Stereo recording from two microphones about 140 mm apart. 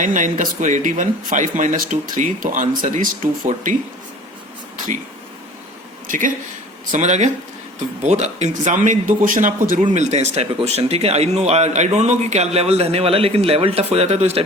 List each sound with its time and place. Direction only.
0.0 s speech: 65° right (ahead or behind)
6.1 s speech: 70° right (ahead or behind)
6.9 s speech: 55° right (ahead or behind)
9.9 s speech: 55° right (ahead or behind)